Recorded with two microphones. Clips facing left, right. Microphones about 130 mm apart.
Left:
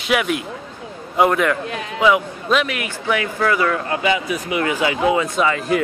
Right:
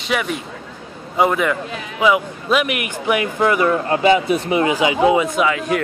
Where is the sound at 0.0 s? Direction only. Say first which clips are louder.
Left 2 dB; 5° left (ahead or behind).